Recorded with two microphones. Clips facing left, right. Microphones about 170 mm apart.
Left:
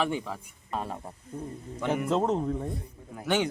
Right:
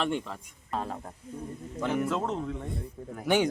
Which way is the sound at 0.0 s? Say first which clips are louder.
Left 1 dB; 5° left (ahead or behind).